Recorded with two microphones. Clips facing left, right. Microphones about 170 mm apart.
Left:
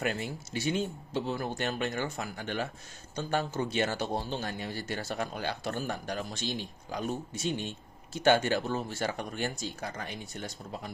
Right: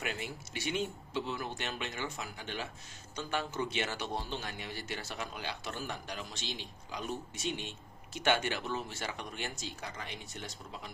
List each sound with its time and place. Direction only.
0.0 s speech: 40° left (ahead or behind)